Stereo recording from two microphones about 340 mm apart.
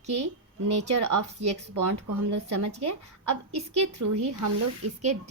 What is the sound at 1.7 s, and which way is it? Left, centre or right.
Speech, right.